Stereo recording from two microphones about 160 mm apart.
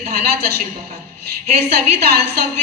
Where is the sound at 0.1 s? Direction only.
75° right (ahead or behind).